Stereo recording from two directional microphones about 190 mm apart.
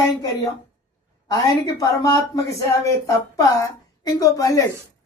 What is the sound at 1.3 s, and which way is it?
A man's voice, 20° left (ahead or behind).